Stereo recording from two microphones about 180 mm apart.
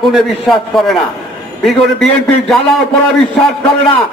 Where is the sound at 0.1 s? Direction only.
Centre (ahead or behind).